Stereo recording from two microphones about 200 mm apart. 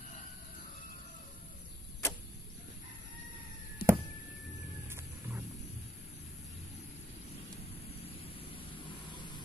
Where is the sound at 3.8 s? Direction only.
50° left (ahead or behind).